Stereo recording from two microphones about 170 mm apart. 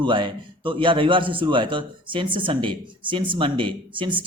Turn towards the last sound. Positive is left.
turn(degrees=-30)  # may be behind; listen again after turning